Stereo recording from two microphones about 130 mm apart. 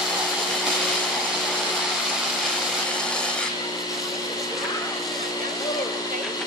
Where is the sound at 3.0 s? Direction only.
5° left (ahead or behind).